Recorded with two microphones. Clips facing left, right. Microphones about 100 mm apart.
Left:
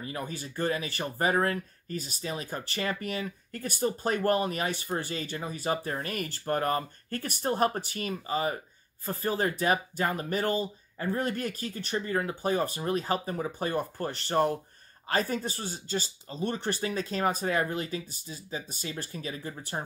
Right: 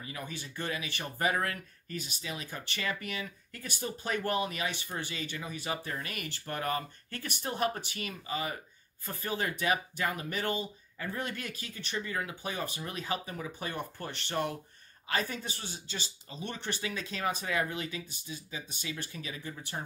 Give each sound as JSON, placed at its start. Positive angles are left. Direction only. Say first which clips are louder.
{"t": 0.0, "sound": "speech", "louder": "left 5 dB", "side_deg": 40}